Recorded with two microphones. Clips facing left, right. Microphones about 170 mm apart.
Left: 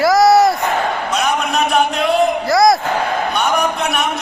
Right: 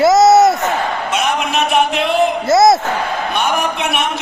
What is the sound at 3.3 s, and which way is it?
Speech, centre (ahead or behind).